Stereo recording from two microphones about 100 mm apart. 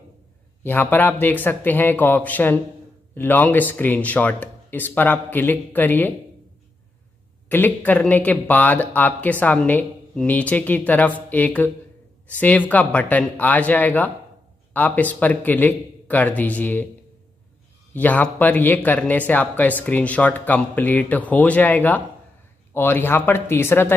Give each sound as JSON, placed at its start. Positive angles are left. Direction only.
{"t": 0.7, "sound": "speech", "side_deg": 20}
{"t": 7.4, "sound": "speech", "side_deg": 20}
{"t": 17.9, "sound": "speech", "side_deg": 15}